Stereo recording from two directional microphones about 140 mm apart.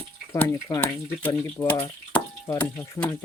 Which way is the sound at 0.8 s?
10° left (ahead or behind).